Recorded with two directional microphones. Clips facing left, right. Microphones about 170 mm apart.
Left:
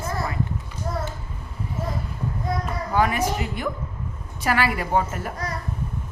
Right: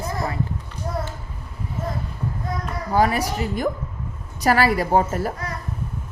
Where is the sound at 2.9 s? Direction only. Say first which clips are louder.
Right 2 dB; 35° right (ahead or behind).